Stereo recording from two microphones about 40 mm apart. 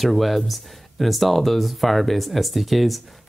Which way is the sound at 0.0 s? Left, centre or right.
Centre.